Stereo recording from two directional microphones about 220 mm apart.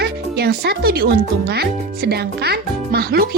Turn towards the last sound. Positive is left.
turn(degrees=-45)  # may be behind; listen again after turning